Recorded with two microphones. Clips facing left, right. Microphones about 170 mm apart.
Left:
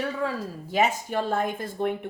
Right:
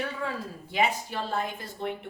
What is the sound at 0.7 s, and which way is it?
Speech, 45° left (ahead or behind).